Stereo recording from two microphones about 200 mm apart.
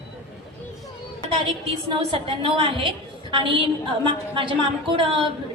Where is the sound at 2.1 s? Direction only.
25° right (ahead or behind).